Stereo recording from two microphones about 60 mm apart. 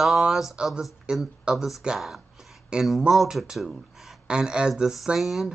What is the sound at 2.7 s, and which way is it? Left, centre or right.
Speech, centre.